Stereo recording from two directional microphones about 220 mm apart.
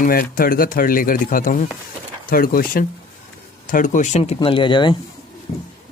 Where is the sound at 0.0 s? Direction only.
40° left (ahead or behind); by 4.9 s 20° left (ahead or behind).